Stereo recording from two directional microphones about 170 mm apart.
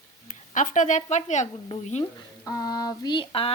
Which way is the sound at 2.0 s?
20° left (ahead or behind).